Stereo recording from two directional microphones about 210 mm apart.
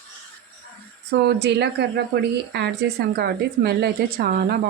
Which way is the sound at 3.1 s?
50° right (ahead or behind).